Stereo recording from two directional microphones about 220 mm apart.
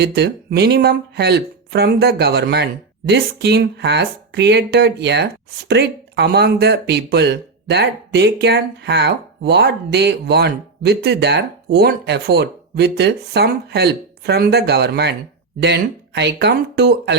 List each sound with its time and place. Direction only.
0.0 s speech: 50° right (ahead or behind)